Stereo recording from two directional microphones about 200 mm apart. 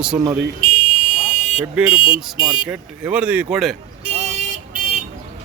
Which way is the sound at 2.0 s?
25° left (ahead or behind).